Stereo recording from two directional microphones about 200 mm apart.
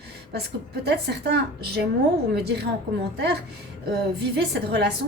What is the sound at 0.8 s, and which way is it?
A woman's voice, 55° right (ahead or behind).